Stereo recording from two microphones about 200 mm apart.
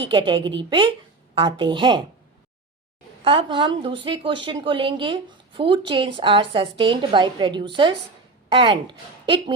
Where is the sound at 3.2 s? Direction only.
25° right (ahead or behind).